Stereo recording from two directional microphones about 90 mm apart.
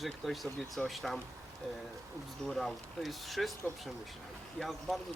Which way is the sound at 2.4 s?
5° left (ahead or behind).